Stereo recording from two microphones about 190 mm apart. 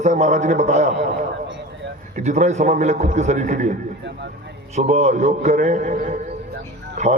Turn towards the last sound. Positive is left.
turn(degrees=-35)  # may be behind; listen again after turning